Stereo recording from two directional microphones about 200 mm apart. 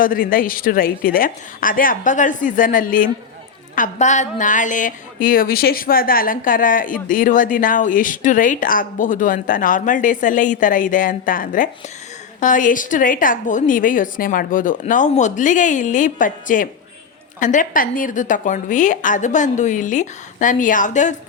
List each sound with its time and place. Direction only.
0.0 s a woman's voice: 45° left (ahead or behind)